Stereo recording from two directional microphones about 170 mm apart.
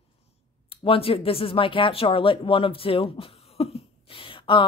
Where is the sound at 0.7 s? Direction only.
35° left (ahead or behind).